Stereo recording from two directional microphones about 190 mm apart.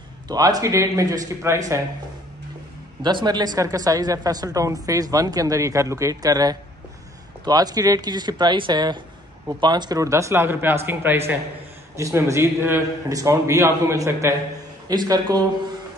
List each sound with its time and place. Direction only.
0.3 s a man's voice: 20° right (ahead or behind)
3.0 s a man's voice: 25° right (ahead or behind)